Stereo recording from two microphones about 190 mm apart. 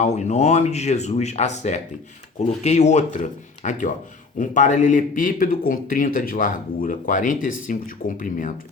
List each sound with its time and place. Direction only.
0.0 s speech: 35° left (ahead or behind)